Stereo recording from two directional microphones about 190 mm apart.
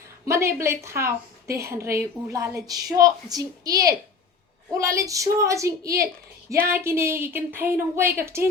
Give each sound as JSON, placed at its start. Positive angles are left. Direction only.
{"t": 0.3, "sound": "a woman's voice", "side_deg": -15}